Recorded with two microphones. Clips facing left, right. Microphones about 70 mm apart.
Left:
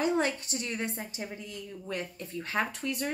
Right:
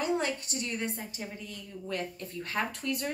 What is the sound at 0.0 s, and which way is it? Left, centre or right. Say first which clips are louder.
A woman's voice: left 2 dB; left.